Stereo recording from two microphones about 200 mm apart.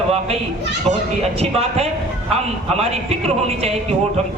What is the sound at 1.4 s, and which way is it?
A man's voice, 30° right (ahead or behind).